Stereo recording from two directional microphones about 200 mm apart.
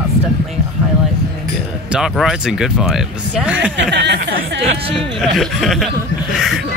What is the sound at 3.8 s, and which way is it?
Speech, 60° right (ahead or behind).